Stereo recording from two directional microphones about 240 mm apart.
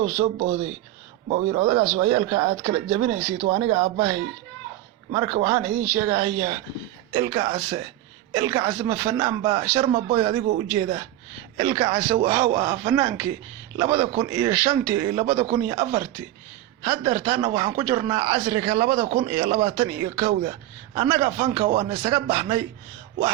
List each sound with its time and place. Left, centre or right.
1.3 s a man's voice: right
5.1 s a man's voice: centre